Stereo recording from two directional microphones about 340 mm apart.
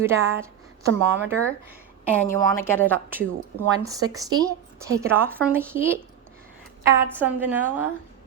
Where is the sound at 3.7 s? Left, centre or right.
Centre.